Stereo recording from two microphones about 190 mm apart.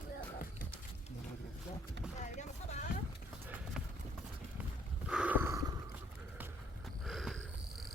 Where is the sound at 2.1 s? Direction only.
40° left (ahead or behind).